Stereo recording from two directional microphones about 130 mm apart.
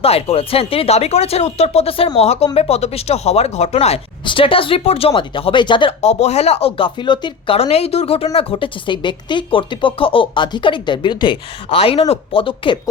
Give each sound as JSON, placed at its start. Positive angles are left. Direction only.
{"t": 0.0, "sound": "speech", "side_deg": 50}
{"t": 4.3, "sound": "speech", "side_deg": 40}
{"t": 6.0, "sound": "speech", "side_deg": 60}